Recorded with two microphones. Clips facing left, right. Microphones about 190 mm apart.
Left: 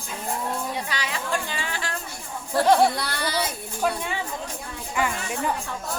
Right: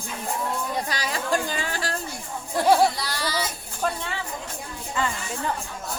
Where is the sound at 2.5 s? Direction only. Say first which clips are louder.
Left 1 dB; 10° right (ahead or behind).